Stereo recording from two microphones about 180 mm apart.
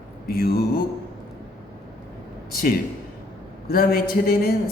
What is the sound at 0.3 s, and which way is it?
Speech, 60° left (ahead or behind).